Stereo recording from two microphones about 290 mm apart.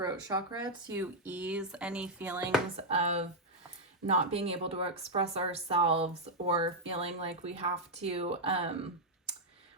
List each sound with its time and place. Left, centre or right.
0.0 s speech: centre
2.7 s speech: right